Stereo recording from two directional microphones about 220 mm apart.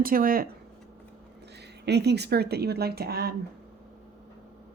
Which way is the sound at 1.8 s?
50° right (ahead or behind).